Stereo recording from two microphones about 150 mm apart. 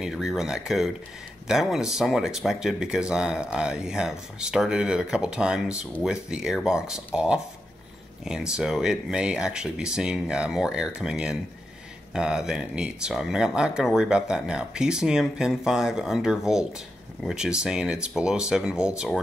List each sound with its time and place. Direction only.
0.0 s speech: centre (ahead or behind)